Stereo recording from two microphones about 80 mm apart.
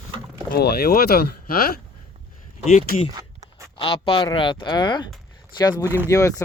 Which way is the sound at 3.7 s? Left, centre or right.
Left.